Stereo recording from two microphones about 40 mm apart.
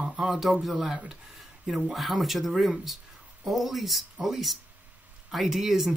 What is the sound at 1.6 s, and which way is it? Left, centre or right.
Speech, centre.